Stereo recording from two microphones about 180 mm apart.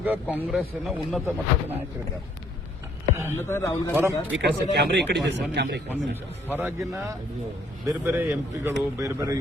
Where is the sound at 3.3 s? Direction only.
15° left (ahead or behind).